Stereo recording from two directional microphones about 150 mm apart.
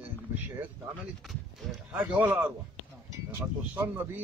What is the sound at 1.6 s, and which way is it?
Speech, centre (ahead or behind).